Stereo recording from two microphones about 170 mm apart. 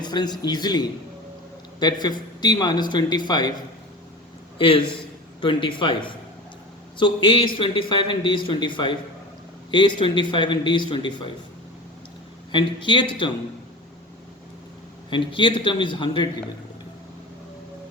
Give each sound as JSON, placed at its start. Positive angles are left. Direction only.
{"t": 0.0, "sound": "speech", "side_deg": 25}
{"t": 4.5, "sound": "a man's voice", "side_deg": 30}
{"t": 12.5, "sound": "speech", "side_deg": 30}
{"t": 15.3, "sound": "speech", "side_deg": 30}